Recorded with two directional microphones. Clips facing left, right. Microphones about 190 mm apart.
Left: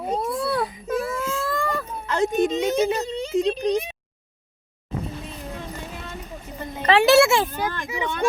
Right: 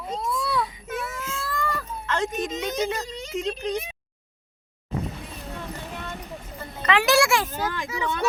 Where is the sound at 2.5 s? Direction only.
30° left (ahead or behind).